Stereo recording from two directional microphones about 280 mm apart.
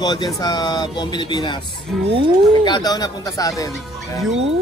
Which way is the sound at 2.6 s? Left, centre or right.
Centre.